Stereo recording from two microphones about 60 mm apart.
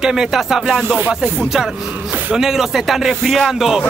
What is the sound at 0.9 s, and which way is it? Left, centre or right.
Speech, right.